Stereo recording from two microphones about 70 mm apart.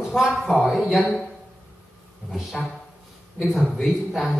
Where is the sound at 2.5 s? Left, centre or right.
Centre.